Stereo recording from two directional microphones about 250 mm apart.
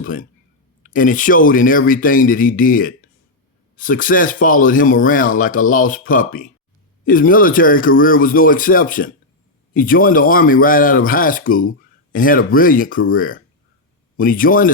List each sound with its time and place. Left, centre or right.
0.0 s speech: left